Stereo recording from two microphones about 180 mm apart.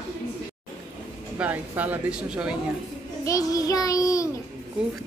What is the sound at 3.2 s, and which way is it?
Child singing, 20° left (ahead or behind).